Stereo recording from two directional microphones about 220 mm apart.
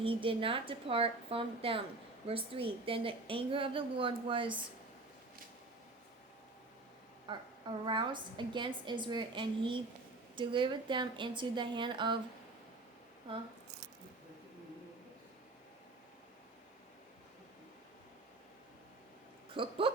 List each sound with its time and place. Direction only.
0.0 s a woman's voice: 25° right (ahead or behind)
7.3 s a woman's voice: 20° right (ahead or behind)
19.5 s speech: 25° right (ahead or behind)